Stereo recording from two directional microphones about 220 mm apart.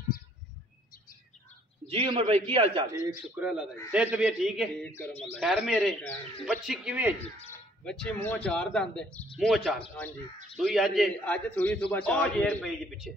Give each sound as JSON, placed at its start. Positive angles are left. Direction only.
{"t": 1.9, "sound": "a man's voice", "side_deg": -25}
{"t": 3.3, "sound": "a man's voice", "side_deg": -5}